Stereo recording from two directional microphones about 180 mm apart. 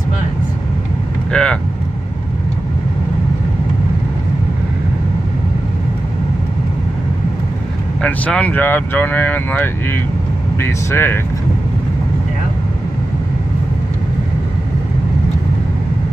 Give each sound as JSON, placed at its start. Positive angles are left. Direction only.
{"t": 1.3, "sound": "speech", "side_deg": 5}
{"t": 8.0, "sound": "speech", "side_deg": 5}